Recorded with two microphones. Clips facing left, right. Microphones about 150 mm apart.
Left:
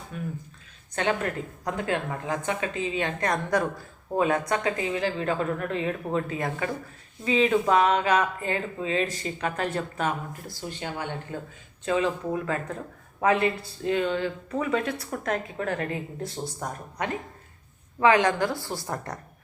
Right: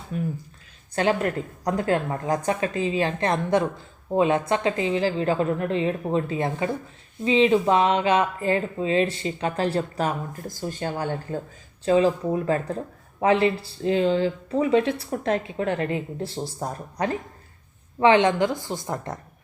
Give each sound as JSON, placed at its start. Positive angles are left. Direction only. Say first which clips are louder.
{"t": 0.1, "sound": "speech", "louder": "right 6 dB", "side_deg": -40}